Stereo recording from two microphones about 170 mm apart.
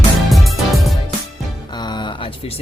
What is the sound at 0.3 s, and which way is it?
Music, centre (ahead or behind).